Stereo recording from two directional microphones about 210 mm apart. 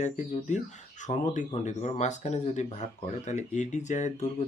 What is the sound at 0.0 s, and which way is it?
Speech, 35° left (ahead or behind).